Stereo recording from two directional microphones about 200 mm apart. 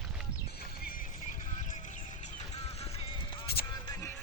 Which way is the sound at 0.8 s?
45° left (ahead or behind).